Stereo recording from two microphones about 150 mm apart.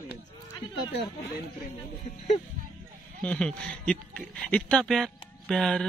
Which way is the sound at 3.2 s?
5° left (ahead or behind).